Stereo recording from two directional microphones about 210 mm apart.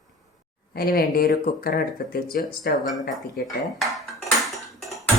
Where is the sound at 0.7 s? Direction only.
45° left (ahead or behind).